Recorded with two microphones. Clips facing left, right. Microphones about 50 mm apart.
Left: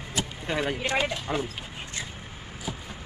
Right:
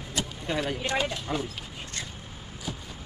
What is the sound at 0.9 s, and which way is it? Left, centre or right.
Speech, centre.